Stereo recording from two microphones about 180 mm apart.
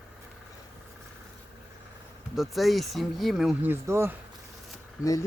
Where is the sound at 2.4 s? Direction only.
Centre (ahead or behind).